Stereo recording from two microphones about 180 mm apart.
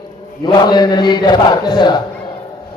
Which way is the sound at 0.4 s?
25° left (ahead or behind).